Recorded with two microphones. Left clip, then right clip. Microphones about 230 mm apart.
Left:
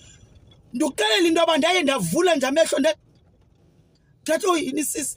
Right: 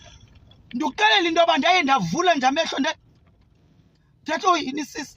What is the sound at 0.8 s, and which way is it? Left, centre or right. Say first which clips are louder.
Speech: right 1 dB; centre.